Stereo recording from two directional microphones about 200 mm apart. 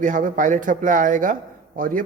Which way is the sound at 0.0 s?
40° right (ahead or behind).